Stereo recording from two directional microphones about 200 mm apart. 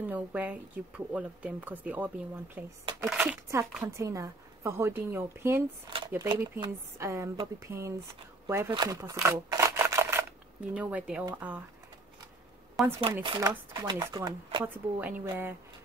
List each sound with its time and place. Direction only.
0.1 s speech: 5° right (ahead or behind)
2.8 s speech: 25° right (ahead or behind)
3.1 s speech: 5° right (ahead or behind)
13.0 s speech: 25° right (ahead or behind)
15.0 s speech: 10° right (ahead or behind)